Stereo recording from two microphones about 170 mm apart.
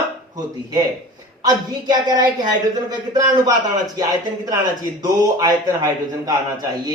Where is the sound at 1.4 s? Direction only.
25° right (ahead or behind).